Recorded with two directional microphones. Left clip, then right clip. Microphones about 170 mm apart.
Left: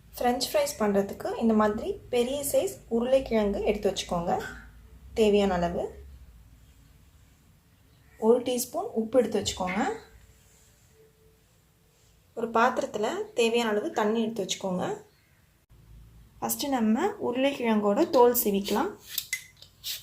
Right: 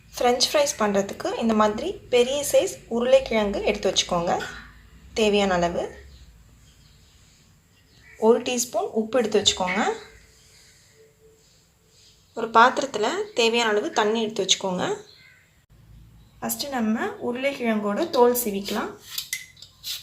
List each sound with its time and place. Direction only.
0.1 s a woman's voice: centre (ahead or behind)
8.2 s a woman's voice: centre (ahead or behind)
12.3 s a woman's voice: centre (ahead or behind)
16.6 s speech: 45° left (ahead or behind)